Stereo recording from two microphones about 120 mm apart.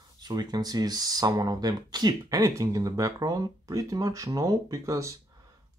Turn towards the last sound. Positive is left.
turn(degrees=-25)  # may be behind; listen again after turning